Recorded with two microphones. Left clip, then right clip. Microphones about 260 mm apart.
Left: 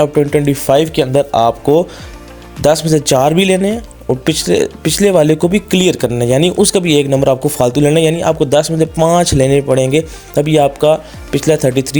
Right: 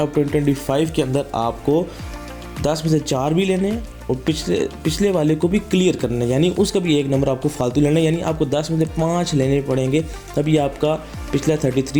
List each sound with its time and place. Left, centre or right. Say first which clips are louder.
0.0 s speech: left 7 dB; left